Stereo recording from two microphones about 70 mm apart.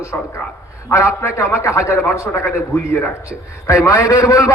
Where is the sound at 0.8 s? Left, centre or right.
Left.